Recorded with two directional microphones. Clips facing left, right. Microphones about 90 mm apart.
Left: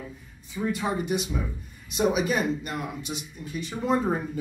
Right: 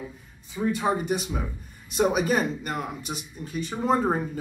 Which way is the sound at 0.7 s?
35° right (ahead or behind).